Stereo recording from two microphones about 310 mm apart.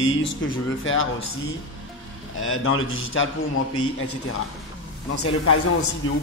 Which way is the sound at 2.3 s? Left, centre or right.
Left.